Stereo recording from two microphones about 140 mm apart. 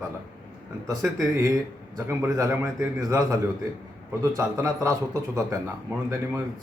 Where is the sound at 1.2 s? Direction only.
25° right (ahead or behind).